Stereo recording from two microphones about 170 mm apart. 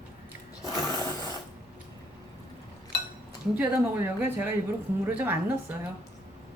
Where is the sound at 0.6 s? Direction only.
20° left (ahead or behind).